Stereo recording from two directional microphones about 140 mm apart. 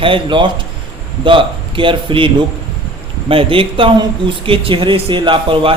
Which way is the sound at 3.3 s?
40° right (ahead or behind).